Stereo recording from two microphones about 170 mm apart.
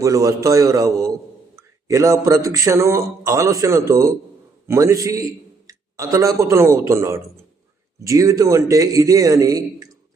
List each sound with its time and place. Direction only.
0.0 s a man's voice: 20° right (ahead or behind)